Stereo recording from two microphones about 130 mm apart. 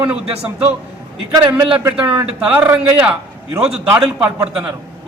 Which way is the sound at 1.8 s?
15° right (ahead or behind).